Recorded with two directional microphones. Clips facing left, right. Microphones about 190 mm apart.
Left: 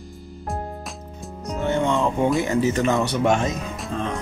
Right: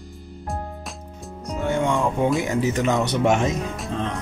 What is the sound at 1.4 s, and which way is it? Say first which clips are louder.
Music: left 1 dB; 5° right (ahead or behind).